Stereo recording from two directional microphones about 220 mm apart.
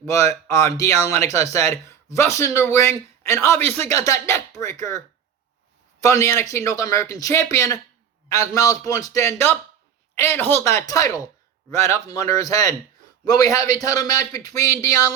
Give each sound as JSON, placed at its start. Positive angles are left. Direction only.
{"t": 0.1, "sound": "speech", "side_deg": 15}